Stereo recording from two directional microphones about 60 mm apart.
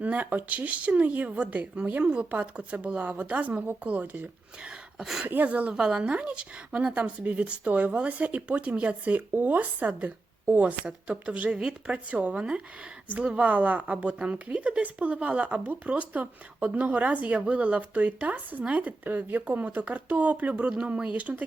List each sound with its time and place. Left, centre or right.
0.0 s a woman's voice: right
4.9 s speech: centre
5.2 s a woman's voice: right